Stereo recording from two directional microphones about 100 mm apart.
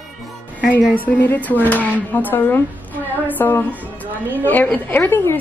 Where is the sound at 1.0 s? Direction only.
20° left (ahead or behind).